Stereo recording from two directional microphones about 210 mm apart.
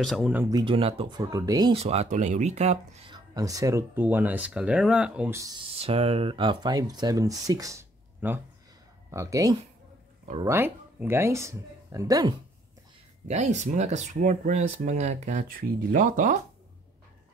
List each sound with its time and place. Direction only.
0.0 s speech: centre (ahead or behind); by 1.2 s 25° right (ahead or behind)
1.3 s speech: 15° right (ahead or behind); by 3.2 s 30° right (ahead or behind)
3.3 s speech: 15° right (ahead or behind)
13.3 s speech: 35° right (ahead or behind)